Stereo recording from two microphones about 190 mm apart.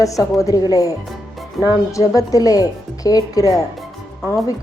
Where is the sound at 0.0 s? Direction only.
15° left (ahead or behind).